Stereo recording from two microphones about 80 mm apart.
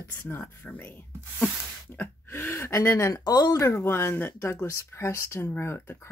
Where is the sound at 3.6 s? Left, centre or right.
Left.